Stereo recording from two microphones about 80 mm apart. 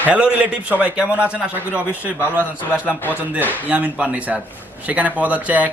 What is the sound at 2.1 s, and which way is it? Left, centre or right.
Speech, left.